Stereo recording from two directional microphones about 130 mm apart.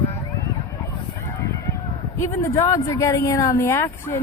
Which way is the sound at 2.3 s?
20° left (ahead or behind).